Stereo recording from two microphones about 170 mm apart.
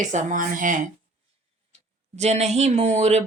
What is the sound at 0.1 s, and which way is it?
Speech, 45° right (ahead or behind).